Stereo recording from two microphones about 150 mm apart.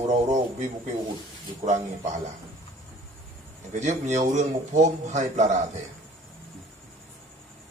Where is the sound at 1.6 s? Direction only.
50° right (ahead or behind).